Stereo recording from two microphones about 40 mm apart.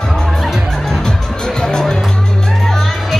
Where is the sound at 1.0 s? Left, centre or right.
Centre.